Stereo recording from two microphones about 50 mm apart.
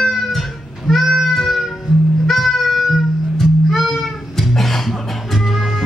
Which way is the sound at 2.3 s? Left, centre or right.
Centre.